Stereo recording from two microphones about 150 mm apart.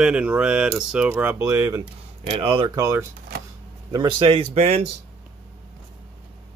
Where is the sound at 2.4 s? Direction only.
35° right (ahead or behind).